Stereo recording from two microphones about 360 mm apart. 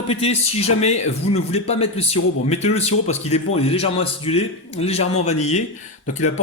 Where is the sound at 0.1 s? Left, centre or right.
Centre.